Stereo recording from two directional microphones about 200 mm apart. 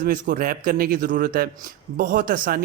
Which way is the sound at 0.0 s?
45° right (ahead or behind).